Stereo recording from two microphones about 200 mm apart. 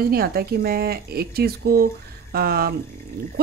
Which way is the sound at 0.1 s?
50° right (ahead or behind).